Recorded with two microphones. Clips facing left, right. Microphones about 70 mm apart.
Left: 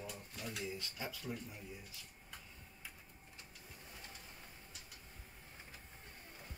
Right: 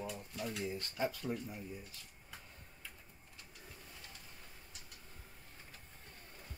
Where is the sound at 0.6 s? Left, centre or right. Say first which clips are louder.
Right 7 dB; right.